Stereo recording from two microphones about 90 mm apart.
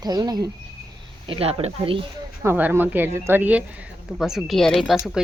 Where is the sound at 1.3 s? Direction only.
80° right.